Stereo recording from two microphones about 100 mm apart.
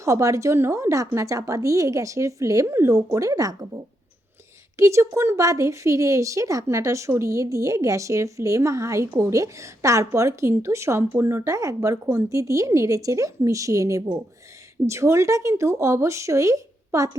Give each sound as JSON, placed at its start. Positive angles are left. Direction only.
{"t": 0.0, "sound": "speech", "side_deg": -30}
{"t": 4.8, "sound": "speech", "side_deg": -30}